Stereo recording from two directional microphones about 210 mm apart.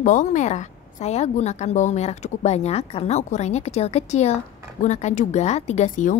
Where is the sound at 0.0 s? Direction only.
35° left (ahead or behind).